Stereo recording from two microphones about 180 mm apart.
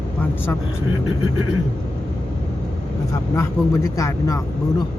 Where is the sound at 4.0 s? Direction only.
15° left (ahead or behind).